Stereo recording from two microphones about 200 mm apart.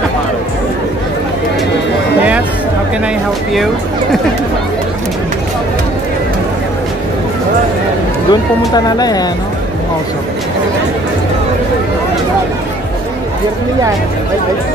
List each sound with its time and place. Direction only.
8.3 s speech: 20° left (ahead or behind)